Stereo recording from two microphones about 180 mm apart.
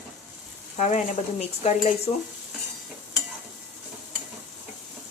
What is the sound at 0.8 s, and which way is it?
Speech, 40° left (ahead or behind).